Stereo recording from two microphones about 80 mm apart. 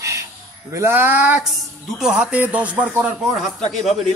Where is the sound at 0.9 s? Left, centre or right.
Right.